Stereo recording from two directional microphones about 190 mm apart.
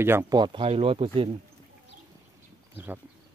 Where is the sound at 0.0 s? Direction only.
10° right (ahead or behind); by 1.3 s 30° right (ahead or behind).